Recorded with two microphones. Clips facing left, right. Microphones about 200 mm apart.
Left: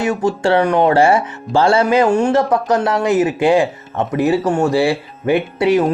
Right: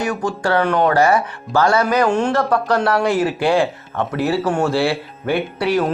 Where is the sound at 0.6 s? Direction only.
10° left (ahead or behind).